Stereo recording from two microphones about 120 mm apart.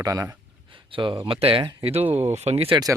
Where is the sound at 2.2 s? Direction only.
65° right (ahead or behind).